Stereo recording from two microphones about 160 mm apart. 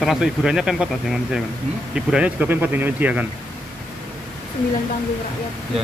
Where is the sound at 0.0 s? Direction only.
Centre (ahead or behind).